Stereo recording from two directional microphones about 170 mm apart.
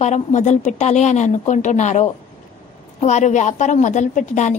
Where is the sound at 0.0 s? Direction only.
45° left (ahead or behind).